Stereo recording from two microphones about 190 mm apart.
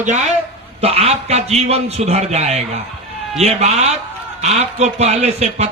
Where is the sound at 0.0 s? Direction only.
35° right (ahead or behind).